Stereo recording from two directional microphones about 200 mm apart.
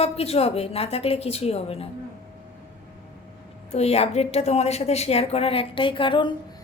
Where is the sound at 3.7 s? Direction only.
30° left (ahead or behind).